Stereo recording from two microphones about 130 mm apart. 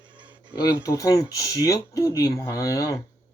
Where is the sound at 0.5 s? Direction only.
25° left (ahead or behind).